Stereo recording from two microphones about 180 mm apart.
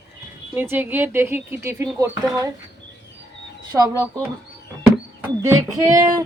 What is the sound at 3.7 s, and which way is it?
Speech, 20° right (ahead or behind).